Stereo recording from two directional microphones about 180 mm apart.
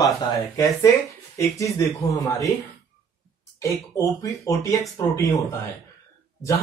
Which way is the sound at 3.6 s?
20° left (ahead or behind).